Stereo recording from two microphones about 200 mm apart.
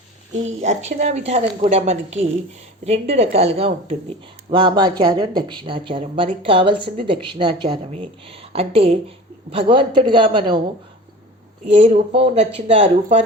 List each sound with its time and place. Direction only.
0.6 s a woman's voice: 35° right (ahead or behind)
11.7 s a woman's voice: 30° right (ahead or behind)